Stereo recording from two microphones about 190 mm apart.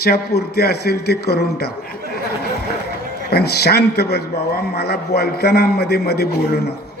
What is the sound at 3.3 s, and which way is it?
A man's voice, 55° left (ahead or behind).